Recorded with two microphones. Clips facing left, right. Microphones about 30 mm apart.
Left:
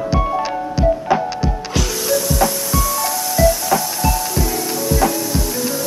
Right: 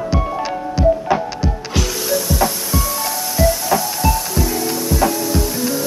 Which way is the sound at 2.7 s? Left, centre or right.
Centre.